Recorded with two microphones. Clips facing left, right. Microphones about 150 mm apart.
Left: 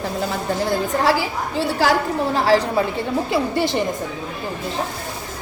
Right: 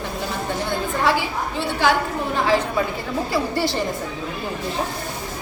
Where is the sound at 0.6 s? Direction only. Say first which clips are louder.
Left 3 dB; 35° left (ahead or behind).